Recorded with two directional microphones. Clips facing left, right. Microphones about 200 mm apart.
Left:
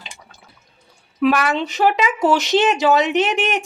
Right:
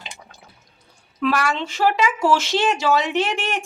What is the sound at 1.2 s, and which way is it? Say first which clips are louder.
Speech: left 4 dB; 20° left (ahead or behind).